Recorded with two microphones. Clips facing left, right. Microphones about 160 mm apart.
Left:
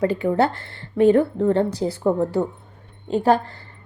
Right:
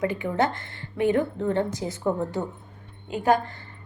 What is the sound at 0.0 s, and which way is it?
A woman's voice, 35° left (ahead or behind).